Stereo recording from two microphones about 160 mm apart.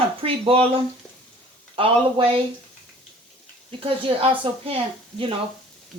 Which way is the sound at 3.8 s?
35° right (ahead or behind).